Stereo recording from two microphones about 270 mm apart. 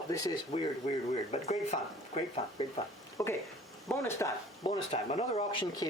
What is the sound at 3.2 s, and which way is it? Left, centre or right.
Speech, centre.